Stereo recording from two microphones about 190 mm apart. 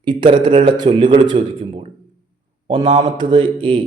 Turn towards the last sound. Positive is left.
turn(degrees=-25)  # may be behind; listen again after turning